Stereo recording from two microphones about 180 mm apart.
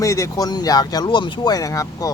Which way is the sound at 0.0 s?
20° left (ahead or behind).